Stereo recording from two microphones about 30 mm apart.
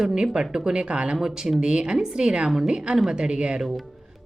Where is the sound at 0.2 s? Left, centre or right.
Right.